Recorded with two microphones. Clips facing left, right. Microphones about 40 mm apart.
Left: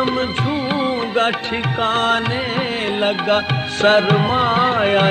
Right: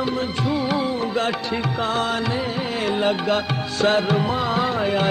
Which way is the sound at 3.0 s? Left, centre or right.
Left.